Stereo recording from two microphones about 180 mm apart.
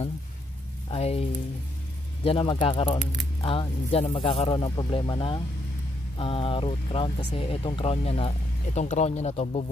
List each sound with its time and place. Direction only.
0.8 s speech: 35° left (ahead or behind)